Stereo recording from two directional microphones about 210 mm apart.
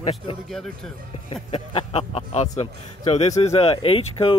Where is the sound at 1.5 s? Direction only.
30° left (ahead or behind).